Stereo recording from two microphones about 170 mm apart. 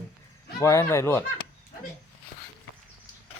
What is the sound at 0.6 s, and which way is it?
Speech, 15° left (ahead or behind).